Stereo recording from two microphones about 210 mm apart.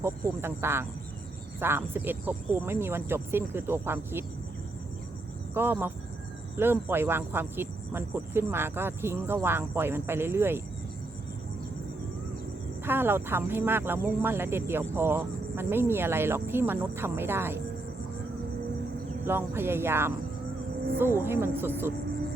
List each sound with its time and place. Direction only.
0.0 s speech: 10° right (ahead or behind)
5.5 s speech: 10° right (ahead or behind)
12.8 s speech: 10° right (ahead or behind)
19.2 s speech: 10° right (ahead or behind)
21.2 s speech: 10° right (ahead or behind)